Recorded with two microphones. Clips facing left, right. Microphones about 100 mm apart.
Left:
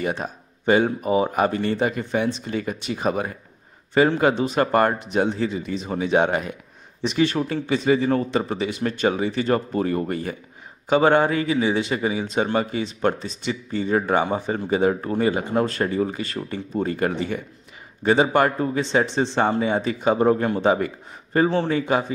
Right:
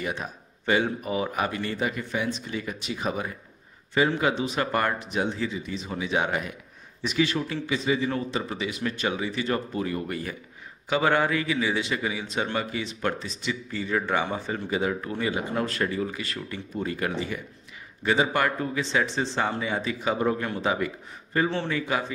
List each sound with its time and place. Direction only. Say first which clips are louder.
0.0 s speech: left 6 dB; 40° left (ahead or behind)